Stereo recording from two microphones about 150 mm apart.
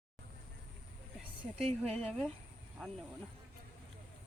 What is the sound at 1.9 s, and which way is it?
A woman's voice, 5° left (ahead or behind).